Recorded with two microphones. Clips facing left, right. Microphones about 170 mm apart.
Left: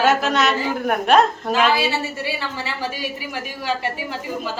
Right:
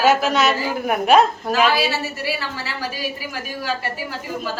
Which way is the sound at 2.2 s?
20° left (ahead or behind).